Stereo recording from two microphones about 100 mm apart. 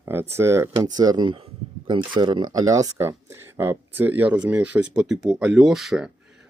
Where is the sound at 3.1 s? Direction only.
25° right (ahead or behind).